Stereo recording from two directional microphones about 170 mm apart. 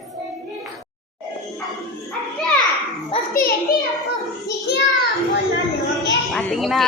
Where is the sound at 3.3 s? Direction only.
60° left (ahead or behind).